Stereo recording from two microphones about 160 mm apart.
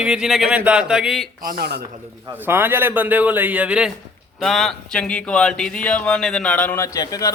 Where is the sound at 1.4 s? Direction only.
65° right (ahead or behind).